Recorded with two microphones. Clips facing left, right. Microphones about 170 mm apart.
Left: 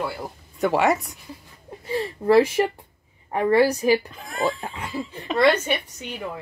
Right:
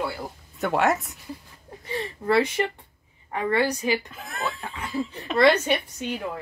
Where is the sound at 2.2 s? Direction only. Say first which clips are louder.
Left 5 dB; 30° left (ahead or behind).